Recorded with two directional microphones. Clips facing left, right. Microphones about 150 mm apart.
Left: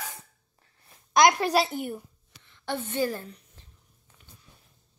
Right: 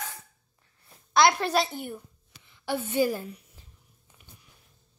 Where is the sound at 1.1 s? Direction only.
10° left (ahead or behind).